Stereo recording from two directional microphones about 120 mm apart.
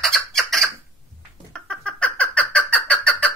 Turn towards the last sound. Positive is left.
turn(degrees=10)  # may be behind; listen again after turning